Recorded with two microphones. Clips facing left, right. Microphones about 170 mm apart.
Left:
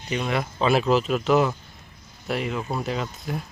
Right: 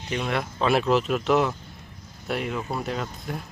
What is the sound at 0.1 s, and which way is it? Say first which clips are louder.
Speech: left 1 dB; centre (ahead or behind).